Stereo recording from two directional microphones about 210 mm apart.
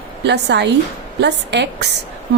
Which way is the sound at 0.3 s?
55° right (ahead or behind).